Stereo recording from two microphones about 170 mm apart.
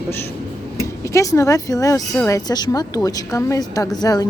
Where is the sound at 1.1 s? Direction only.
20° left (ahead or behind).